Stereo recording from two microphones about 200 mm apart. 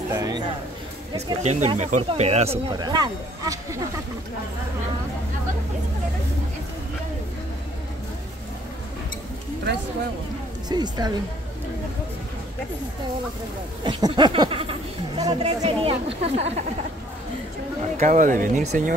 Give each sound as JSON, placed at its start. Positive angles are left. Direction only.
{"t": 0.1, "sound": "a sound", "side_deg": -20}
{"t": 1.1, "sound": "speech", "side_deg": -35}
{"t": 10.7, "sound": "speech", "side_deg": -20}
{"t": 13.8, "sound": "speech", "side_deg": -25}
{"t": 17.9, "sound": "speech", "side_deg": -40}